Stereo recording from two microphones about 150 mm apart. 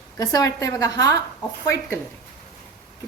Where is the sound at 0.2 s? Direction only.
25° left (ahead or behind).